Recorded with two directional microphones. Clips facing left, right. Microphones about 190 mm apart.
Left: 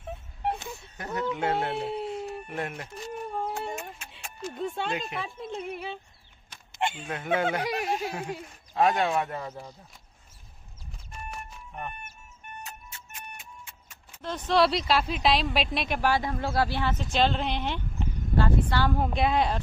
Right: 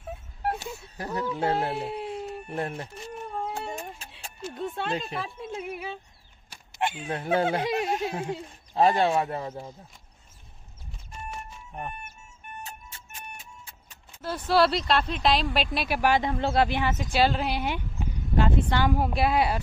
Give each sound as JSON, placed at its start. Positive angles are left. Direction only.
{"t": 0.6, "sound": "a sound", "side_deg": -35}
{"t": 1.3, "sound": "speech", "side_deg": -35}
{"t": 1.7, "sound": "a sound", "side_deg": 0}
{"t": 2.4, "sound": "speech", "side_deg": -30}
{"t": 3.2, "sound": "a sound", "side_deg": 0}
{"t": 4.4, "sound": "speech", "side_deg": 0}
{"t": 7.5, "sound": "speech", "side_deg": -25}
{"t": 14.2, "sound": "speech", "side_deg": -5}
{"t": 16.0, "sound": "speech", "side_deg": -20}
{"t": 18.9, "sound": "speech", "side_deg": -5}